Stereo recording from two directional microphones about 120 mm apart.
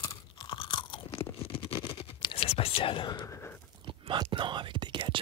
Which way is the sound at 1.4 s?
55° left (ahead or behind).